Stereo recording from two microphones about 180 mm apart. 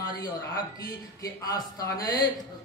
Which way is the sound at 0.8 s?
20° left (ahead or behind).